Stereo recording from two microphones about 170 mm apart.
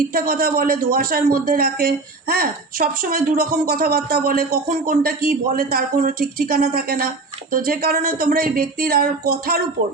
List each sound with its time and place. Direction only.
0.1 s a man's voice: 60° right (ahead or behind)